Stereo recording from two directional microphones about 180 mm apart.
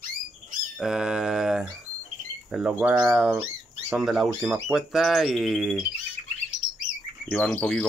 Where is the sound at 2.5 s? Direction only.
5° right (ahead or behind).